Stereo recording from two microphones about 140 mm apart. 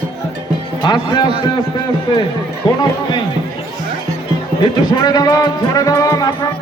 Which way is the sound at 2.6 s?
35° left (ahead or behind).